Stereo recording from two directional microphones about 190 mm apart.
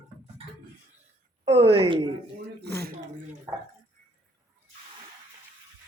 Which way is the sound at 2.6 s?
60° right (ahead or behind).